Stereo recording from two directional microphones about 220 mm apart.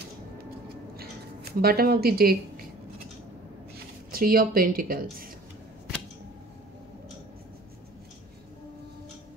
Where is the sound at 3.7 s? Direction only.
40° right (ahead or behind).